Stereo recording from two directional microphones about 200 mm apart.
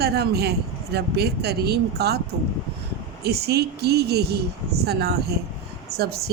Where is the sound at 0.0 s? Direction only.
55° right (ahead or behind).